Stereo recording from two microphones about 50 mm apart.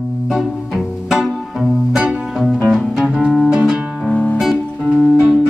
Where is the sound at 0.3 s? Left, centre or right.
Centre.